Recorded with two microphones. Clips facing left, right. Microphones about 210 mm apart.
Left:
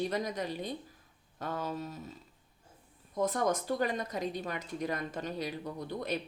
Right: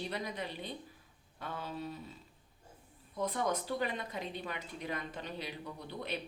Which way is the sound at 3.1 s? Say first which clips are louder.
Left 4 dB; 45° left (ahead or behind).